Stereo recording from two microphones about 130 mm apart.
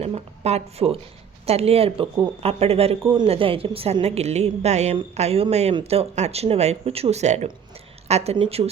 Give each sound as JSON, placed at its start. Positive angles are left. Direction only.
{"t": 0.0, "sound": "a woman's voice", "side_deg": -55}